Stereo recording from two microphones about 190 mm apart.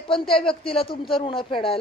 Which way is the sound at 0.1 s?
25° left (ahead or behind).